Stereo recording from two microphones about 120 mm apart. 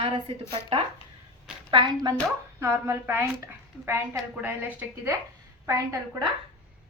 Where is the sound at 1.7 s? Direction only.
35° right (ahead or behind).